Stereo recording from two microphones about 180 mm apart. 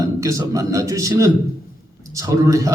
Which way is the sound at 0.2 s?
15° right (ahead or behind).